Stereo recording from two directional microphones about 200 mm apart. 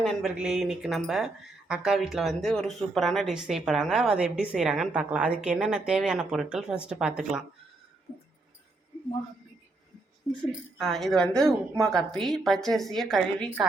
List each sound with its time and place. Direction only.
0.0 s a woman's voice: centre (ahead or behind)
10.8 s a woman's voice: centre (ahead or behind)